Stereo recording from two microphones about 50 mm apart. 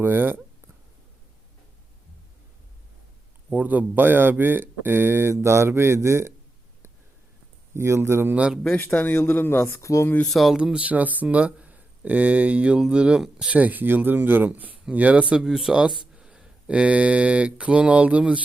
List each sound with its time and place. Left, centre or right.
0.0 s speech: right
3.5 s speech: right
5.3 s speech: right
7.7 s speech: right
8.8 s speech: left
9.6 s speech: left
10.3 s speech: centre
10.6 s speech: right
13.5 s speech: right
15.4 s speech: centre
16.1 s mantra: centre